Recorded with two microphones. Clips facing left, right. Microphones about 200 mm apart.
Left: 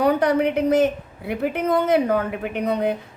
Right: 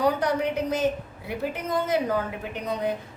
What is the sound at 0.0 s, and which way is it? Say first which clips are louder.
A woman's voice: left 5 dB; 60° left (ahead or behind).